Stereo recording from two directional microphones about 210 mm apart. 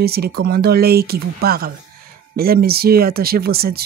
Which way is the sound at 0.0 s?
50° right (ahead or behind).